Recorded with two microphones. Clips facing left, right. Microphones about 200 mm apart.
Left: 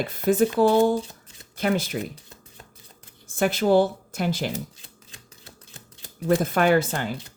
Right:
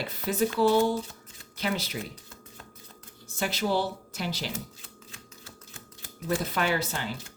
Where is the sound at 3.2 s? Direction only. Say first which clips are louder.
Left 8 dB; 50° left (ahead or behind).